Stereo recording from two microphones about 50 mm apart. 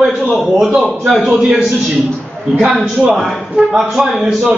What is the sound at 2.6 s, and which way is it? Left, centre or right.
A woman's voice, centre.